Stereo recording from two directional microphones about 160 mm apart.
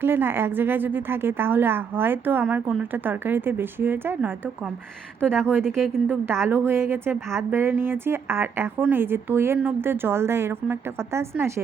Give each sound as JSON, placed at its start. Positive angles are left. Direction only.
{"t": 0.0, "sound": "a woman's voice", "side_deg": -15}
{"t": 5.2, "sound": "speech", "side_deg": 5}
{"t": 6.4, "sound": "a woman's voice", "side_deg": -15}